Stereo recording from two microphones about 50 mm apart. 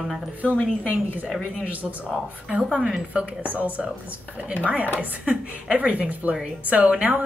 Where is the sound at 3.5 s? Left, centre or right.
Right.